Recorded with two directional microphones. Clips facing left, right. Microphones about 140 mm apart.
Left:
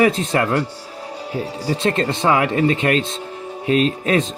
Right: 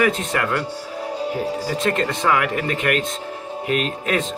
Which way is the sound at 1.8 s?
30° left (ahead or behind).